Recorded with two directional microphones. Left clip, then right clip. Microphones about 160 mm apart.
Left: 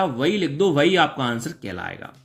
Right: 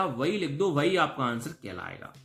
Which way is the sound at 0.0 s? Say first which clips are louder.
Left 7 dB; 40° left (ahead or behind).